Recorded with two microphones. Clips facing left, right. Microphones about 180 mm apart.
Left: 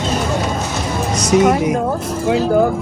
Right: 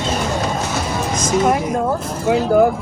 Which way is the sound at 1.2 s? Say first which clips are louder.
Left 4 dB; 70° left (ahead or behind).